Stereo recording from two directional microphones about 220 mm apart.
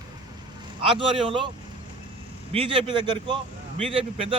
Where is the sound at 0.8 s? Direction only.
25° right (ahead or behind).